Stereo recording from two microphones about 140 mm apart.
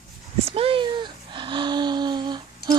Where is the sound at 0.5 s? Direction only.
40° right (ahead or behind).